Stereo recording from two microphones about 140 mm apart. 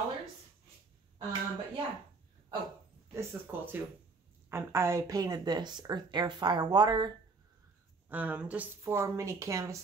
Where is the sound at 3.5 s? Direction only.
15° right (ahead or behind); by 7.1 s 30° right (ahead or behind).